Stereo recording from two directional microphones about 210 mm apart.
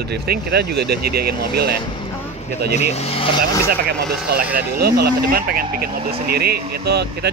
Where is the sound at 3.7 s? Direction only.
45° right (ahead or behind).